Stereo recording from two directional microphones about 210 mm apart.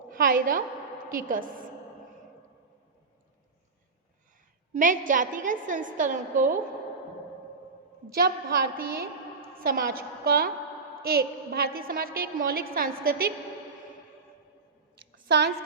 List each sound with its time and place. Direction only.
0.1 s a woman's voice: 40° right (ahead or behind)
4.7 s a woman's voice: 40° right (ahead or behind)
8.1 s a woman's voice: 45° right (ahead or behind)
15.3 s a woman's voice: 50° right (ahead or behind)